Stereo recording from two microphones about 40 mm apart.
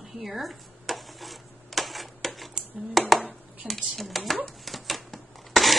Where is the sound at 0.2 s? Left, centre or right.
Centre.